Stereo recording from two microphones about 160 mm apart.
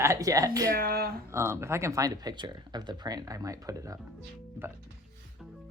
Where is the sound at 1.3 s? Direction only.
15° right (ahead or behind).